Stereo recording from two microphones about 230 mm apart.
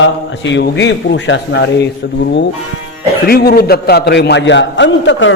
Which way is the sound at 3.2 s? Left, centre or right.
Left.